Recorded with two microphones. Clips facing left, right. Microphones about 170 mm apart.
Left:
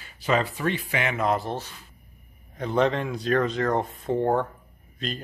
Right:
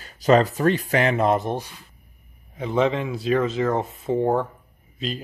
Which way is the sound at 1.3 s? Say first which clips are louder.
Right 4 dB; 20° right (ahead or behind).